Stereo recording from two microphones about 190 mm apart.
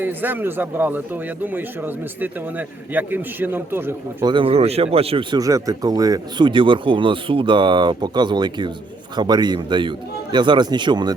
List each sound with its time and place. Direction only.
0.0 s speech: 10° right (ahead or behind)
4.3 s speech: 25° right (ahead or behind)